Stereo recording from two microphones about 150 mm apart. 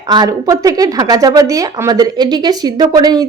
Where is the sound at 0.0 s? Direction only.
25° right (ahead or behind).